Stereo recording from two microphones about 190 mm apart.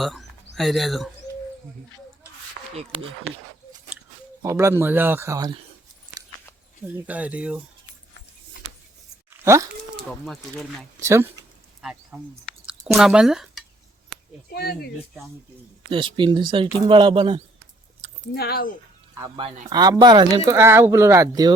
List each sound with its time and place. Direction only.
0.0 s speech: centre (ahead or behind)
2.6 s a sound: 50° right (ahead or behind)
4.4 s speech: 15° right (ahead or behind)
6.8 s speech: 10° right (ahead or behind)
9.4 s speech: 15° right (ahead or behind)
10.5 s speech: centre (ahead or behind)
11.0 s speech: 15° right (ahead or behind)
11.8 s speech: 5° right (ahead or behind)
14.5 s speech: 55° left (ahead or behind)
15.9 s speech: 25° right (ahead or behind)
18.0 s a sound: 35° right (ahead or behind)
18.3 s speech: 55° left (ahead or behind)
19.4 s speech: 25° right (ahead or behind)